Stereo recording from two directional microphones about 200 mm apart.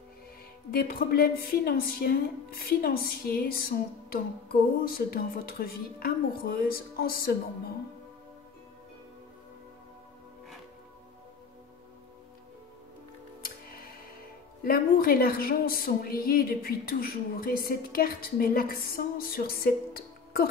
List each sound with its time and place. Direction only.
0.7 s a woman's voice: 50° left (ahead or behind)
14.6 s a woman's voice: 50° left (ahead or behind)